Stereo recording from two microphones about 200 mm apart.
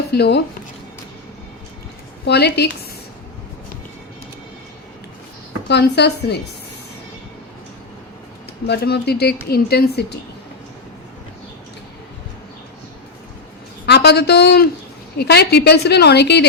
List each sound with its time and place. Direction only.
0.1 s speech: 55° left (ahead or behind)
2.2 s a woman's voice: 55° left (ahead or behind)
5.6 s a woman's voice: 55° left (ahead or behind)
8.6 s speech: 55° left (ahead or behind)
13.8 s a woman's voice: 55° left (ahead or behind)